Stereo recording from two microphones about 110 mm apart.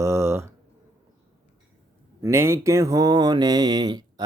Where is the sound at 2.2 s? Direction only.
25° right (ahead or behind).